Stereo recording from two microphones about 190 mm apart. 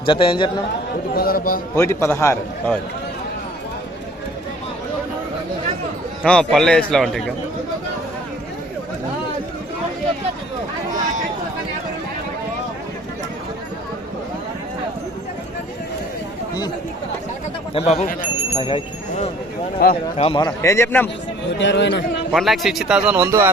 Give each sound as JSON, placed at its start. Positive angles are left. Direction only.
{"t": 0.0, "sound": "a man's voice", "side_deg": 25}
{"t": 1.1, "sound": "a man's voice", "side_deg": 50}
{"t": 1.7, "sound": "a man's voice", "side_deg": 15}
{"t": 6.2, "sound": "a man's voice", "side_deg": 5}
{"t": 17.7, "sound": "speech", "side_deg": 35}
{"t": 19.8, "sound": "a man's voice", "side_deg": 55}
{"t": 20.1, "sound": "a man's voice", "side_deg": 30}
{"t": 20.6, "sound": "a man's voice", "side_deg": 15}
{"t": 21.6, "sound": "speech", "side_deg": 70}
{"t": 22.3, "sound": "a man's voice", "side_deg": 0}
{"t": 23.1, "sound": "speech", "side_deg": -15}